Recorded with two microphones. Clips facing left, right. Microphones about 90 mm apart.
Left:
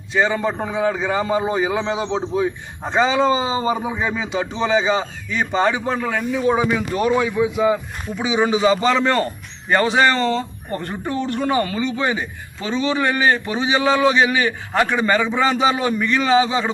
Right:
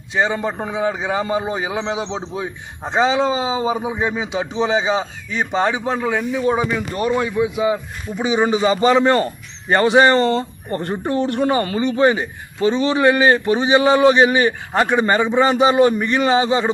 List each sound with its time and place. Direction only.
0.1 s a man's voice: 15° right (ahead or behind)
9.6 s a man's voice: 50° right (ahead or behind)
10.2 s a man's voice: 35° right (ahead or behind)
11.9 s a man's voice: 50° right (ahead or behind)
12.7 s a man's voice: 35° right (ahead or behind)
14.7 s a man's voice: 25° right (ahead or behind); by 16.6 s 40° right (ahead or behind)